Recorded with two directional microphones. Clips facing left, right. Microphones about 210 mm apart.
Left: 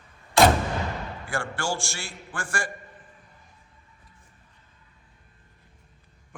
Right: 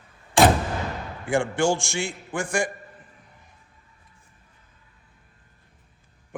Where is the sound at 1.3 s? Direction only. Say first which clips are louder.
Right 9 dB; 15° right (ahead or behind).